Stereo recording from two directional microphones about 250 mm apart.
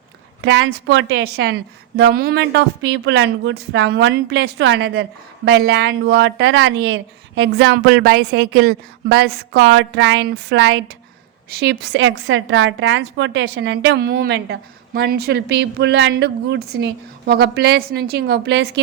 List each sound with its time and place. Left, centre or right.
0.4 s a woman's voice: right